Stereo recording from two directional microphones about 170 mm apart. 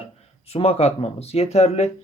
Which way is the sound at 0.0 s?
35° left (ahead or behind).